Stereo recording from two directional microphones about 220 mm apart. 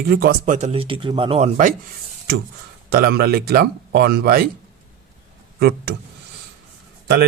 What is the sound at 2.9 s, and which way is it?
Speech, 45° right (ahead or behind).